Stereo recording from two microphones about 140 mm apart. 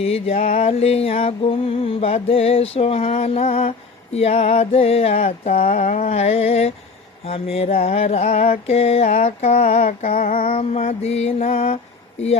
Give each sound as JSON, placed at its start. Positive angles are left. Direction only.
{"t": 0.0, "sound": "mantra", "side_deg": 45}
{"t": 10.0, "sound": "music", "side_deg": 75}
{"t": 10.5, "sound": "mantra", "side_deg": 45}